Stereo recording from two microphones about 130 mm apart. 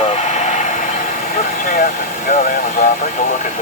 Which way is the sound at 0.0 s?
55° left (ahead or behind).